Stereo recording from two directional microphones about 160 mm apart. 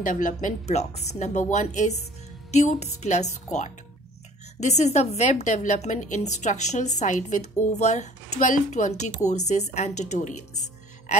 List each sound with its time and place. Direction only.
0.0 s speech: 55° left (ahead or behind)